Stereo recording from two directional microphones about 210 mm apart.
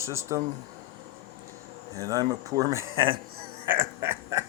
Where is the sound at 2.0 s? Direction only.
15° right (ahead or behind).